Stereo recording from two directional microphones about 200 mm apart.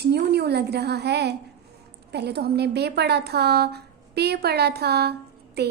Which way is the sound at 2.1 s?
55° right (ahead or behind).